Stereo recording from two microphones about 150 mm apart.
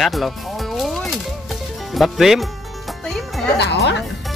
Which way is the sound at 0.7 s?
Centre (ahead or behind).